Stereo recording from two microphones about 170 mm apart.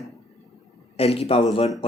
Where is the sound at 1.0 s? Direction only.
35° left (ahead or behind).